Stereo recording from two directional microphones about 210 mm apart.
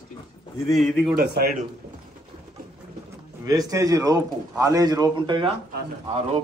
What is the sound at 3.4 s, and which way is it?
A man's voice, 15° right (ahead or behind).